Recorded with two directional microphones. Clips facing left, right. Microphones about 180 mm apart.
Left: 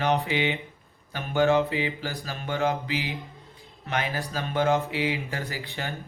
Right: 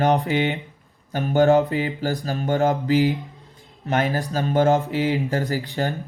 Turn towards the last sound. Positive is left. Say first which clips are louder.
# right 9 dB
turn(degrees=-40)  # may be behind; listen again after turning